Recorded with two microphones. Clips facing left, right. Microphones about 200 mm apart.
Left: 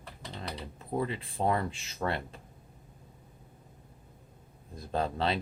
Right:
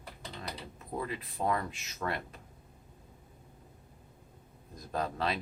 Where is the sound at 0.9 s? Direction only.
30° left (ahead or behind).